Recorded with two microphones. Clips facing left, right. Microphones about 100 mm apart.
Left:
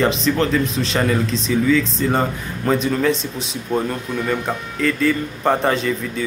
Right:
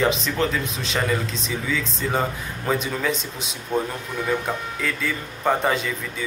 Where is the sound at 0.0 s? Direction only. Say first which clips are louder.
Left 4 dB; 5° right (ahead or behind).